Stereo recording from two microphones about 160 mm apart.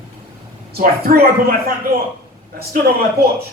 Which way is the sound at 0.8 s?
60° right (ahead or behind).